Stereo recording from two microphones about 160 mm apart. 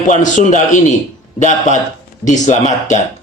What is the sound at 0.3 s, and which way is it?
Speech, 50° left (ahead or behind).